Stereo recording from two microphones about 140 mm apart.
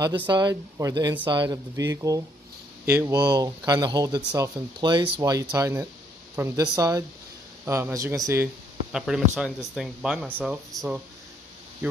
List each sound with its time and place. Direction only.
0.3 s speech: 30° right (ahead or behind)
3.2 s speech: 30° right (ahead or behind)
5.2 s speech: 25° right (ahead or behind)
8.9 s speech: 5° right (ahead or behind)